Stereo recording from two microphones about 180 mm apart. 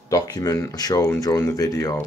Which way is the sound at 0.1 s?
20° left (ahead or behind).